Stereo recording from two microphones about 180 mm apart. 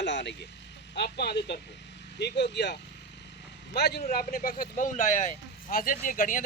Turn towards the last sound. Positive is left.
turn(degrees=50)  # may be behind; listen again after turning